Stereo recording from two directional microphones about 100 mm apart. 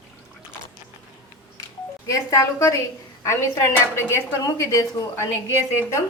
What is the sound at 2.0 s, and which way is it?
A woman's voice, 30° left (ahead or behind).